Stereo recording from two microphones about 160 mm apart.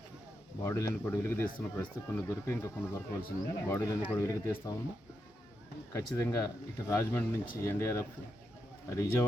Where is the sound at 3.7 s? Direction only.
15° left (ahead or behind).